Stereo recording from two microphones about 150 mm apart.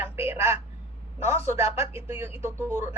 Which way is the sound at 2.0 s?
15° right (ahead or behind).